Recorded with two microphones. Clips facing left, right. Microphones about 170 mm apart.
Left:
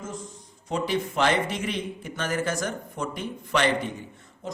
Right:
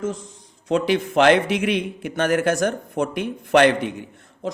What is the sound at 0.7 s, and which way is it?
A man's voice, 70° right (ahead or behind).